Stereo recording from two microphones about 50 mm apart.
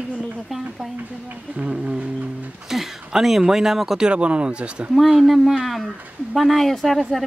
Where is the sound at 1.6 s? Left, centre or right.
Right.